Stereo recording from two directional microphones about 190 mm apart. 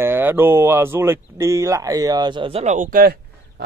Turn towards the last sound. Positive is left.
turn(degrees=-55)  # may be behind; listen again after turning